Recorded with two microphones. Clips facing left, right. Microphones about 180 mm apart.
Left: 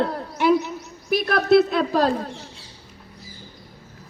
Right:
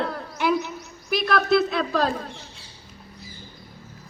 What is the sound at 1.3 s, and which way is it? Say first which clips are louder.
Speech: left 4 dB; 50° left (ahead or behind).